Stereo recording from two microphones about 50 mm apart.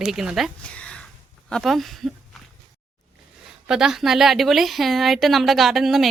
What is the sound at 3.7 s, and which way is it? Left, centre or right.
A woman's voice, centre.